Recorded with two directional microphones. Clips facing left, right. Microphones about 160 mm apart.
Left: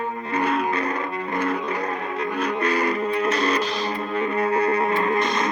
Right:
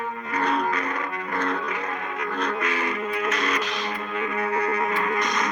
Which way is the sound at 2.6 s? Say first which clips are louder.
Left 5 dB; 35° left (ahead or behind).